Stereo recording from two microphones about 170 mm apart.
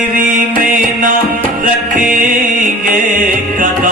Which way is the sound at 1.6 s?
55° right (ahead or behind).